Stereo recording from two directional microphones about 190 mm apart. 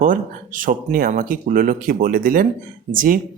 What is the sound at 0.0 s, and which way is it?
A man's voice, 45° right (ahead or behind).